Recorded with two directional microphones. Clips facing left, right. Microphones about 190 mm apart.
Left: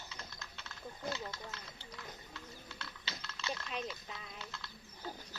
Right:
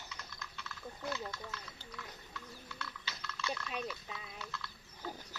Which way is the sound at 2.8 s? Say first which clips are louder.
Right 2 dB; 25° left (ahead or behind).